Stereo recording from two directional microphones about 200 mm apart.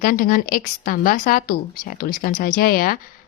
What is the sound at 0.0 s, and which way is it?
Speech, 45° left (ahead or behind).